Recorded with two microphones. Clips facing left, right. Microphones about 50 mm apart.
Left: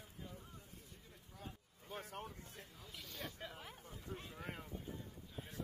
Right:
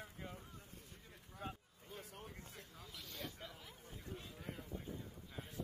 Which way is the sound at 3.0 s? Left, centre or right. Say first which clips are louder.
Left 1 dB; centre.